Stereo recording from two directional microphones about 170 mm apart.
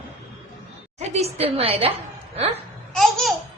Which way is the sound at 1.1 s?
40° right (ahead or behind).